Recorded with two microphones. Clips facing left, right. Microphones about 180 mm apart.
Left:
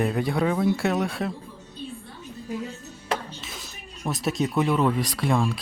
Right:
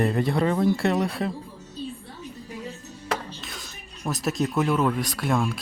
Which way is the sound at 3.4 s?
Centre (ahead or behind).